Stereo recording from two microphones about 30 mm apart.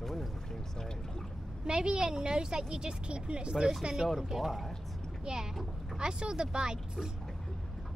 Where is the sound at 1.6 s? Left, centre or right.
Right.